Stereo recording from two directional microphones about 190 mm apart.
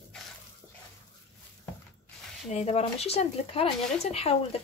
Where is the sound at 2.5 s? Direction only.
35° left (ahead or behind).